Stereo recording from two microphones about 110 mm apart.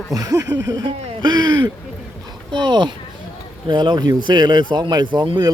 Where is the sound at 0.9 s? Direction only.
40° right (ahead or behind).